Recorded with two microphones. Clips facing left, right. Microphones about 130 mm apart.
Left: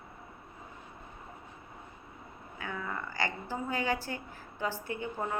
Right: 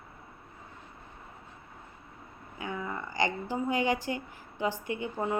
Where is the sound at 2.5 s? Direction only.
15° right (ahead or behind).